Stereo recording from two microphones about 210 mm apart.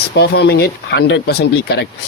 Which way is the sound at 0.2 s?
50° left (ahead or behind).